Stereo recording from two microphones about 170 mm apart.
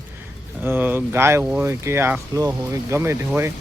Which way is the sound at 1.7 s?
15° right (ahead or behind).